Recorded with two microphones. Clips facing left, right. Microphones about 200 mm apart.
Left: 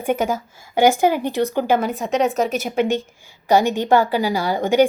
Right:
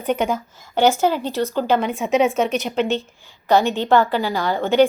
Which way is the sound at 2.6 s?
10° left (ahead or behind).